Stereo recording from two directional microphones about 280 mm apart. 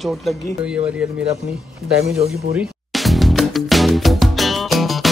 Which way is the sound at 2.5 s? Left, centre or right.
Centre.